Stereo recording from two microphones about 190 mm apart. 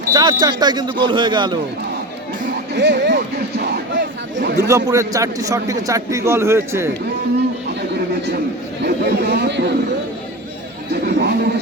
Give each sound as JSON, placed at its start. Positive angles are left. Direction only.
{"t": 0.1, "sound": "speech", "side_deg": -20}
{"t": 2.7, "sound": "a sound", "side_deg": -65}
{"t": 4.7, "sound": "a man's voice", "side_deg": -15}
{"t": 8.8, "sound": "speech", "side_deg": -60}
{"t": 10.9, "sound": "speech", "side_deg": -60}